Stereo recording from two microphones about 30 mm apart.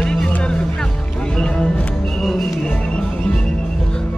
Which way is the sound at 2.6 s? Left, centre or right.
Left.